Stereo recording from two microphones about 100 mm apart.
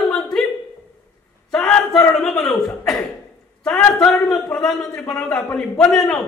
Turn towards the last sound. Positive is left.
turn(degrees=10)  # may be behind; listen again after turning